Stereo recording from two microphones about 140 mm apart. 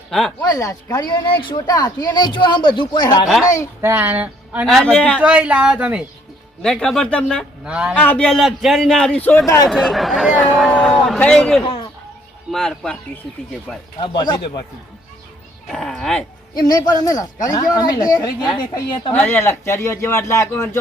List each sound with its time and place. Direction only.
0.1 s speech: 5° left (ahead or behind)
0.4 s a woman's voice: 25° left (ahead or behind)
1.3 s speech: 35° left (ahead or behind)
3.8 s speech: 15° right (ahead or behind)
4.6 s speech: centre (ahead or behind)
5.2 s speech: 10° right (ahead or behind)
6.6 s speech: 5° left (ahead or behind)
7.6 s speech: 5° right (ahead or behind)
7.9 s speech: 10° left (ahead or behind)
9.6 s speech: centre (ahead or behind)
14.0 s speech: 30° left (ahead or behind)
15.7 s speech: 5° left (ahead or behind)
16.6 s a woman's voice: 30° left (ahead or behind)
19.2 s a man's voice: 15° left (ahead or behind)